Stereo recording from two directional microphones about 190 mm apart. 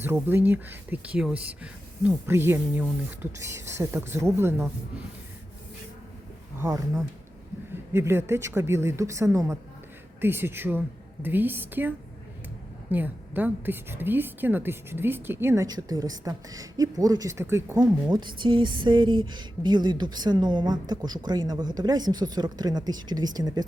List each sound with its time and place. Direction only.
0.0 s speech: 10° right (ahead or behind)
6.6 s a woman's voice: 15° right (ahead or behind)